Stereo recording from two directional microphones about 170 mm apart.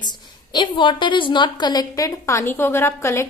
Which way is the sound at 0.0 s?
25° left (ahead or behind).